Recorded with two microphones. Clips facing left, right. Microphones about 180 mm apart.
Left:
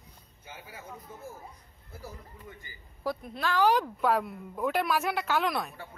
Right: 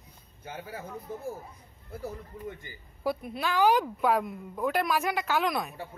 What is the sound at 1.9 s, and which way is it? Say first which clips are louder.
Speech: right 7 dB; 55° right (ahead or behind).